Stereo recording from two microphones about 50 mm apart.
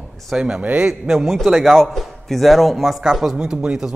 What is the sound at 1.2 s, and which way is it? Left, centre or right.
Speech, centre.